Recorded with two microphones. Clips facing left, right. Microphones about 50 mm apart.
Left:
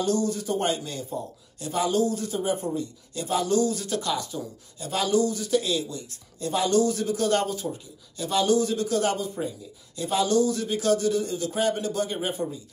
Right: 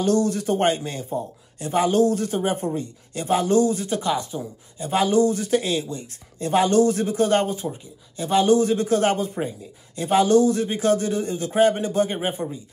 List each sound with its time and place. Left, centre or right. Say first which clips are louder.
0.0 s speech: right 5 dB; right